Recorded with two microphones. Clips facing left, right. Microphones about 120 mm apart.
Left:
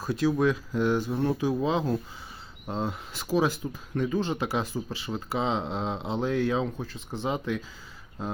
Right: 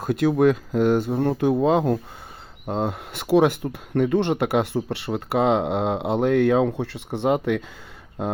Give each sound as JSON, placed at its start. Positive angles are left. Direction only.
{"t": 0.0, "sound": "speech", "side_deg": -55}